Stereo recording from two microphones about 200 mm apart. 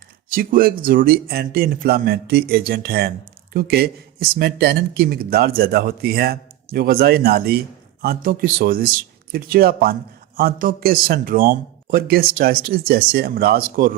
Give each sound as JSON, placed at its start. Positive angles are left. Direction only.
{"t": 0.3, "sound": "speech", "side_deg": -45}